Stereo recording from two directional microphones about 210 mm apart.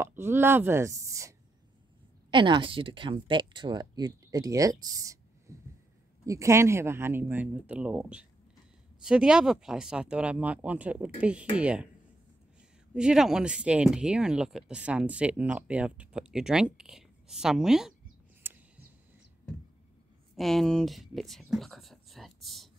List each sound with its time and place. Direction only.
0.0 s speech: 10° right (ahead or behind)
2.3 s speech: 25° right (ahead or behind)
5.5 s a sound: 15° right (ahead or behind)
6.2 s speech: 15° right (ahead or behind)
12.9 s speech: 5° right (ahead or behind)
18.4 s a sound: 10° right (ahead or behind)
20.3 s speech: centre (ahead or behind)